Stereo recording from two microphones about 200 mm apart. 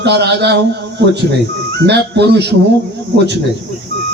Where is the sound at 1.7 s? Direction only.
55° right (ahead or behind).